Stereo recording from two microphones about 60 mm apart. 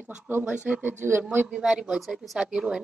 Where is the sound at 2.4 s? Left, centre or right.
Centre.